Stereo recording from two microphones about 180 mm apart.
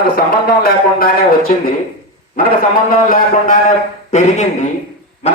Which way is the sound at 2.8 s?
50° left (ahead or behind).